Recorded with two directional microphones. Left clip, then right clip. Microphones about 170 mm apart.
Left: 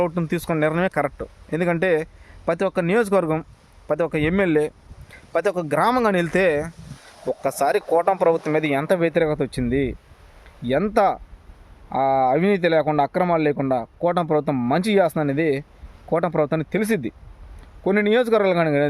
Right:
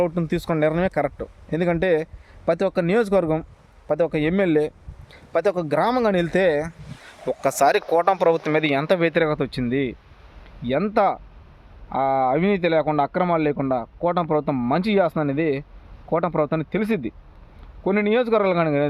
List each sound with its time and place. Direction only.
0.0 s speech: 5° left (ahead or behind)